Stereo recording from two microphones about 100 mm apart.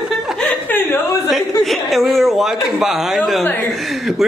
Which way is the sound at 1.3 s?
Centre (ahead or behind).